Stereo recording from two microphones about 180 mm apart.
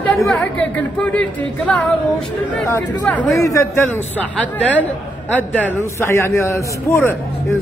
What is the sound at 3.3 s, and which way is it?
Speech, 15° left (ahead or behind).